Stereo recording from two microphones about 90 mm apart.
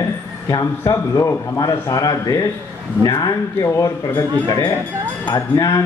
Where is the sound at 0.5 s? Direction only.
35° left (ahead or behind).